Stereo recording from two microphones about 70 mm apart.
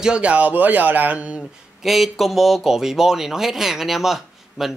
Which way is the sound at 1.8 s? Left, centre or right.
Centre.